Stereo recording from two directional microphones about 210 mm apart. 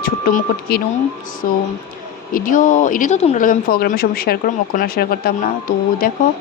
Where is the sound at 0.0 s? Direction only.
45° left (ahead or behind).